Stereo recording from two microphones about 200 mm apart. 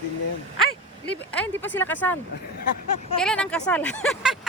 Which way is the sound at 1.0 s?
5° left (ahead or behind).